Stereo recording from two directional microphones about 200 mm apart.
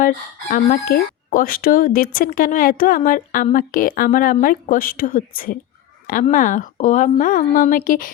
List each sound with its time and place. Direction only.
0.0 s a woman's voice: 45° left (ahead or behind)